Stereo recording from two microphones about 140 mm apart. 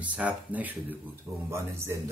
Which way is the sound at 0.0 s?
10° right (ahead or behind).